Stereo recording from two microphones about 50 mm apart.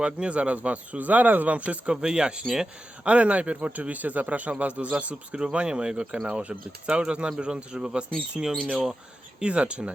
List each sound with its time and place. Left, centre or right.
0.0 s speech: right
1.9 s speech: centre